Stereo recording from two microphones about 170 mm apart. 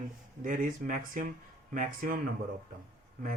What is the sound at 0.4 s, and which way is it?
Speech, 50° right (ahead or behind).